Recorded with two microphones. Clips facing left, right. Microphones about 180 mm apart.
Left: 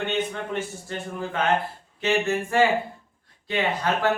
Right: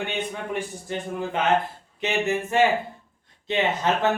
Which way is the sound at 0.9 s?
15° right (ahead or behind).